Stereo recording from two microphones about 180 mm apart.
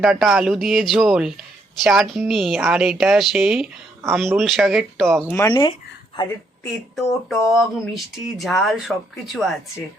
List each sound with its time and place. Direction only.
0.0 s speech: centre (ahead or behind)
5.3 s speech: 20° left (ahead or behind)
6.9 s speech: centre (ahead or behind)